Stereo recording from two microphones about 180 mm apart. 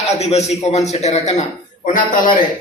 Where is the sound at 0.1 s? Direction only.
35° left (ahead or behind).